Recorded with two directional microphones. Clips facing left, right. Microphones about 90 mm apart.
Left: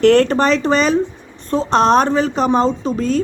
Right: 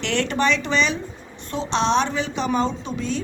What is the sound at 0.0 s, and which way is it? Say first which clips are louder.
A woman's voice: left 10 dB; 45° left (ahead or behind).